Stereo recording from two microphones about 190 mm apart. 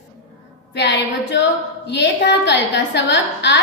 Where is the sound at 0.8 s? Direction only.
65° left (ahead or behind).